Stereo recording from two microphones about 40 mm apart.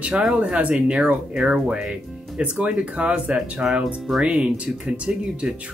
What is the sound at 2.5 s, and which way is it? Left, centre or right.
Speech, right.